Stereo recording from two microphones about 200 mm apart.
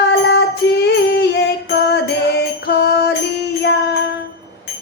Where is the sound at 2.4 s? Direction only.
55° left (ahead or behind).